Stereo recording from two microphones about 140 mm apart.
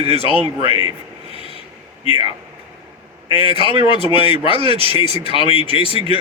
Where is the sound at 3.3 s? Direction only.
40° left (ahead or behind).